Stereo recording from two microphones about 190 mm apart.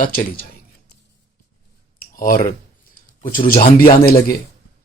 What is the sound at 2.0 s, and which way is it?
Clicking, 50° left (ahead or behind).